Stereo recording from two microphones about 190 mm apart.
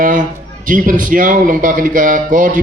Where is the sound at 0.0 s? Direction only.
45° right (ahead or behind).